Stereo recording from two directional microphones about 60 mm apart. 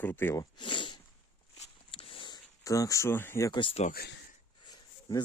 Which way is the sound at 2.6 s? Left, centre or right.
Left.